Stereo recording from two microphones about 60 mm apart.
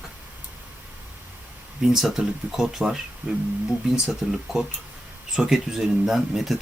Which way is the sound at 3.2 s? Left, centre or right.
Centre.